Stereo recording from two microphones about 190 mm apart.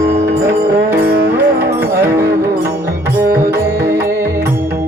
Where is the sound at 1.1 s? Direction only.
55° right (ahead or behind).